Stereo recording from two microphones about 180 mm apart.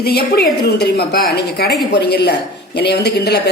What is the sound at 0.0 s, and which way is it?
A woman's voice, 60° left (ahead or behind).